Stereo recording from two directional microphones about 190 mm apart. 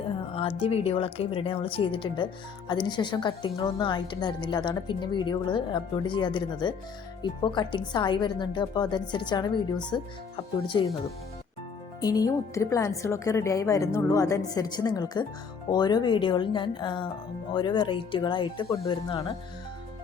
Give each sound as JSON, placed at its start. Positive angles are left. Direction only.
{"t": 0.3, "sound": "a woman's voice", "side_deg": 30}
{"t": 11.9, "sound": "a woman's voice", "side_deg": 20}